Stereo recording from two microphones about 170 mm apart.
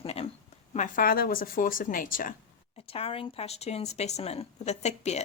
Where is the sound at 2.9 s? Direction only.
35° left (ahead or behind).